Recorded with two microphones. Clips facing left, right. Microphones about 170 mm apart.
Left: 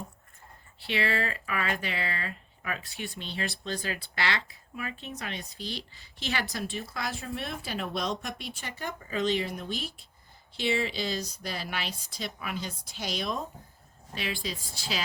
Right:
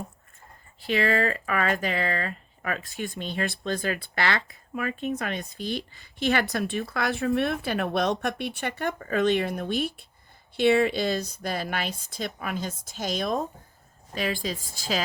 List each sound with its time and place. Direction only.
0.8 s speech: 45° right (ahead or behind)